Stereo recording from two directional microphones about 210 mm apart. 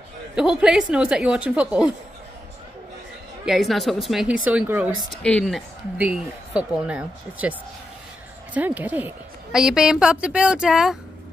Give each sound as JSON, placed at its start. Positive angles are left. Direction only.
{"t": 0.4, "sound": "a woman's voice", "side_deg": -5}
{"t": 3.4, "sound": "a woman's voice", "side_deg": 0}
{"t": 5.2, "sound": "a woman's voice", "side_deg": 5}
{"t": 8.5, "sound": "a woman's voice", "side_deg": -5}